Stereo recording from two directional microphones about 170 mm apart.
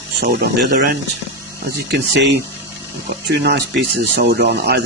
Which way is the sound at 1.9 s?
75° right (ahead or behind).